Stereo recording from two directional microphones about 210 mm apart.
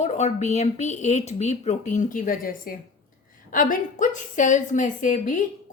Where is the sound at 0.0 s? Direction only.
30° left (ahead or behind).